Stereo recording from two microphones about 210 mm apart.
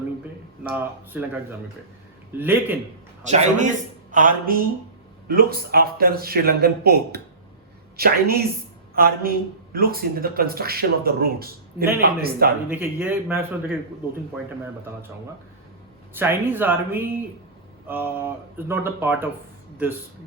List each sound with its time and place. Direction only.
0.7 s speech: 10° right (ahead or behind)
3.2 s a man's voice: 35° right (ahead or behind)
12.7 s speech: 10° right (ahead or behind)
16.1 s speech: 10° right (ahead or behind)